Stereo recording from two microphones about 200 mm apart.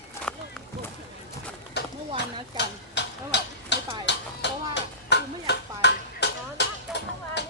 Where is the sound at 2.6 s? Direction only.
60° left (ahead or behind).